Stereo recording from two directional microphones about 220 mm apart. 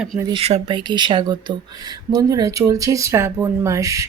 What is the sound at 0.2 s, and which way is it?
A woman's voice, 20° right (ahead or behind).